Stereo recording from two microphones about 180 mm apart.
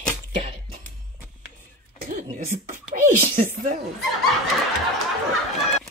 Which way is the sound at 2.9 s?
50° right (ahead or behind).